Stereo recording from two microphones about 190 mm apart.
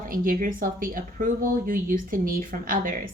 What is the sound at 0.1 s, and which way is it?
Speech, 45° right (ahead or behind).